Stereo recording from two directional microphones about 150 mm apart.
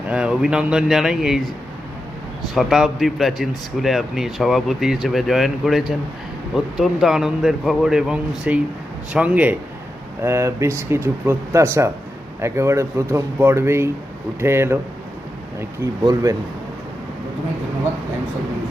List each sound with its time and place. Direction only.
0.1 s speech: 5° right (ahead or behind)
2.6 s a man's voice: centre (ahead or behind)